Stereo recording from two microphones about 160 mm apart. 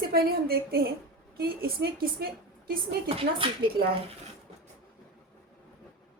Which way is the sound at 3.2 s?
35° right (ahead or behind).